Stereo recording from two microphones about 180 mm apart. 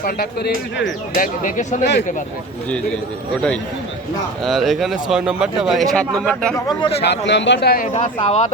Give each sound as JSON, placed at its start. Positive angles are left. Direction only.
{"t": 0.0, "sound": "speech", "side_deg": 60}
{"t": 1.1, "sound": "speech", "side_deg": 50}
{"t": 1.8, "sound": "speech", "side_deg": 70}
{"t": 2.6, "sound": "a man's voice", "side_deg": 5}
{"t": 4.4, "sound": "speech", "side_deg": 0}
{"t": 7.0, "sound": "speech", "side_deg": 75}
{"t": 8.2, "sound": "speech", "side_deg": 35}